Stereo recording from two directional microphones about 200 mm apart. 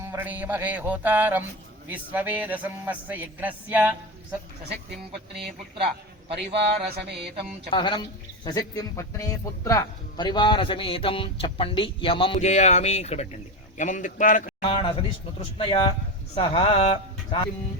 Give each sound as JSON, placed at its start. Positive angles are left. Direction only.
{"t": 0.0, "sound": "a man's voice", "side_deg": -10}
{"t": 6.4, "sound": "a sound", "side_deg": -55}
{"t": 7.7, "sound": "speech", "side_deg": 20}
{"t": 15.4, "sound": "speech", "side_deg": 25}